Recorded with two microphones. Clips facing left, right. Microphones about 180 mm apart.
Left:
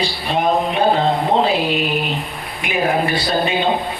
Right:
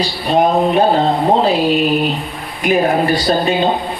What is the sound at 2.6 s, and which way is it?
Speech, 40° right (ahead or behind).